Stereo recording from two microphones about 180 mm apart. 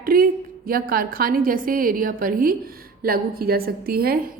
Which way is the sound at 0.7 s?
55° right (ahead or behind).